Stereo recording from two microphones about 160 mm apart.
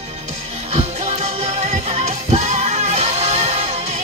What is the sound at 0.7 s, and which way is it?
Music, 40° right (ahead or behind).